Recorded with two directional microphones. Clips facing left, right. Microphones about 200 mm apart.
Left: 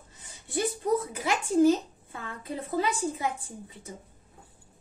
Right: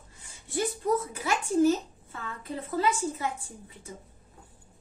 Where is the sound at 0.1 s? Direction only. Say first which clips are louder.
Right 2 dB; 20° left (ahead or behind).